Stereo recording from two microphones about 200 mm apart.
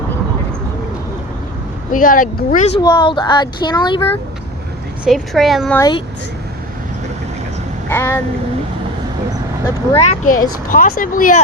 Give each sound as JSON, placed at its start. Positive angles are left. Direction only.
{"t": 1.9, "sound": "speech", "side_deg": 45}
{"t": 2.8, "sound": "speech", "side_deg": 20}
{"t": 5.0, "sound": "speech", "side_deg": 0}
{"t": 5.7, "sound": "speech", "side_deg": 15}
{"t": 7.9, "sound": "speech", "side_deg": 10}
{"t": 9.9, "sound": "speech", "side_deg": 35}
{"t": 10.7, "sound": "speech", "side_deg": 45}